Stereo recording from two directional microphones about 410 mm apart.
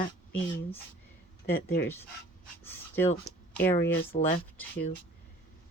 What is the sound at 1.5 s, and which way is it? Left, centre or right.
Speech, left.